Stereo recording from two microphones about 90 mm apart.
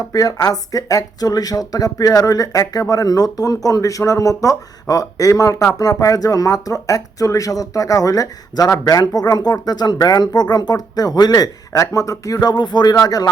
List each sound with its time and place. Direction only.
0.1 s speech: 45° left (ahead or behind)